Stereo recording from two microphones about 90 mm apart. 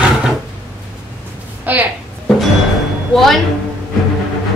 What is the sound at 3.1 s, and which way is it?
Speech, centre (ahead or behind).